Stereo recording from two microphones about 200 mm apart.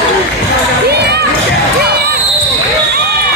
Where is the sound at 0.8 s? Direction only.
55° right (ahead or behind).